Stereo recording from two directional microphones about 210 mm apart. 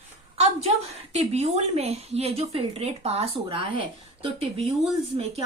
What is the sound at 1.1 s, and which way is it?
A woman's voice, 30° right (ahead or behind).